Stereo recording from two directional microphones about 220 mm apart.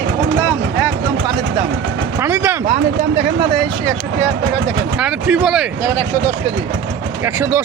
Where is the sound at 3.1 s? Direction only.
25° right (ahead or behind).